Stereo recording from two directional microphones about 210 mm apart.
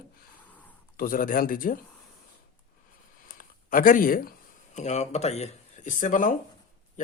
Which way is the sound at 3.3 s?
40° left (ahead or behind).